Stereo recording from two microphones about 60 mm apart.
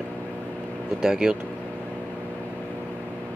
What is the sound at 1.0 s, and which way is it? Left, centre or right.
Speech, centre.